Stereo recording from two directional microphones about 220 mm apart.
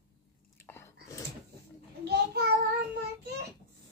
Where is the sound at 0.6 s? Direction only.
10° left (ahead or behind).